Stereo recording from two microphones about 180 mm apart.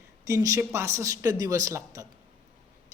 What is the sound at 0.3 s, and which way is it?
Speech, 15° right (ahead or behind).